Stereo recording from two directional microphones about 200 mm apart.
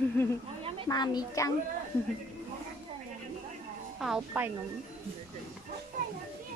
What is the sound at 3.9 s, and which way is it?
Child singing, centre (ahead or behind).